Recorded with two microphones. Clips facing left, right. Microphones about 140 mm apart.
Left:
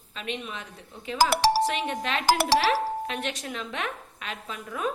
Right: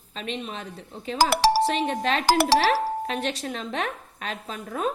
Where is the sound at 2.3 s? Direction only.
90° right.